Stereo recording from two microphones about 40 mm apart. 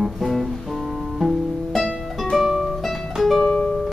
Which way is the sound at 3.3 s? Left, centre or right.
Centre.